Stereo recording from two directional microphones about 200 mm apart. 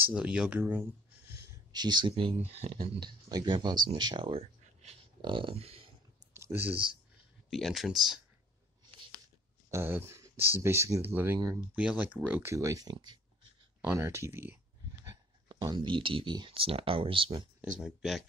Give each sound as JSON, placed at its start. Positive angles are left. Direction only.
{"t": 0.0, "sound": "speech", "side_deg": -5}
{"t": 1.3, "sound": "a sound", "side_deg": -15}
{"t": 2.5, "sound": "speech", "side_deg": -30}
{"t": 3.0, "sound": "speech", "side_deg": -20}
{"t": 6.3, "sound": "a sound", "side_deg": -10}
{"t": 7.4, "sound": "speech", "side_deg": 0}
{"t": 9.7, "sound": "speech", "side_deg": -10}
{"t": 13.7, "sound": "speech", "side_deg": -10}
{"t": 17.7, "sound": "speech", "side_deg": 0}